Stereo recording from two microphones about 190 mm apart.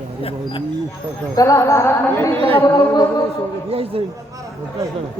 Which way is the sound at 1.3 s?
15° left (ahead or behind).